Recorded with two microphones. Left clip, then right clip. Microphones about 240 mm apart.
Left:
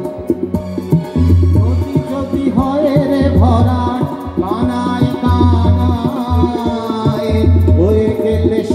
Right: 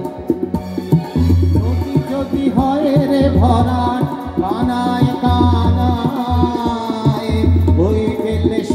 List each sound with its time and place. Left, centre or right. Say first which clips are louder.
2.8 s music: left 3 dB; right